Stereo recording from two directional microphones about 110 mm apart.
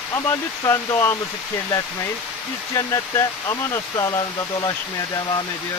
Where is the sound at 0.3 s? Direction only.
25° left (ahead or behind).